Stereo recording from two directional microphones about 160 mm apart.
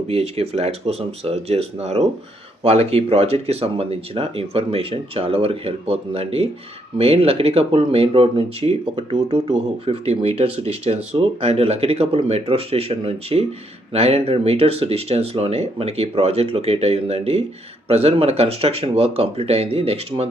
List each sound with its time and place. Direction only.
0.1 s speech: 40° right (ahead or behind)